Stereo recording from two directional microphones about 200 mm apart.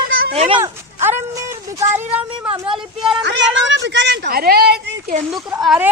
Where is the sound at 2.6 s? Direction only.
25° right (ahead or behind).